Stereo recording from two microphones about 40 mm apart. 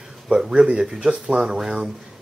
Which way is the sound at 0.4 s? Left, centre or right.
Centre.